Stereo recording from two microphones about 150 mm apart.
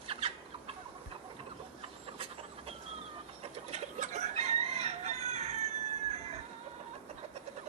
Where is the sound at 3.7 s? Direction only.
50° right (ahead or behind).